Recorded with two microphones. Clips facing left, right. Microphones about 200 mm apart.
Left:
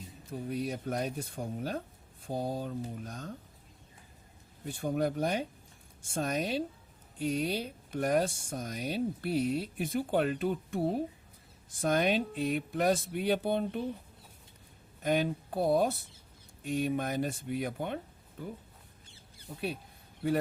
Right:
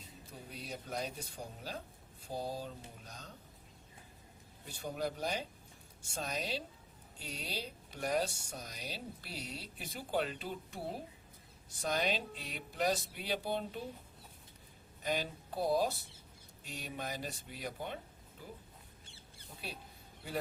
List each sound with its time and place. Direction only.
0.3 s speech: 55° left (ahead or behind)
4.6 s speech: 50° left (ahead or behind)
15.0 s speech: 55° left (ahead or behind)